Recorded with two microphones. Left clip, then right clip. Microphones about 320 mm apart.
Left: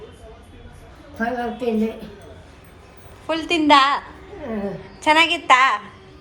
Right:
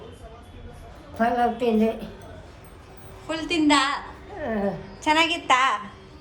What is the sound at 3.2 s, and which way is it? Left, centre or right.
Speech, centre.